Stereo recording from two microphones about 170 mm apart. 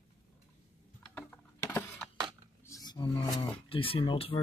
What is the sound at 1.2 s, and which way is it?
Typing, 10° left (ahead or behind).